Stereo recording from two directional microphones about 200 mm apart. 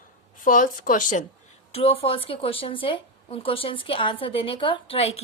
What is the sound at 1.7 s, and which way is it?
A woman's voice, 25° left (ahead or behind).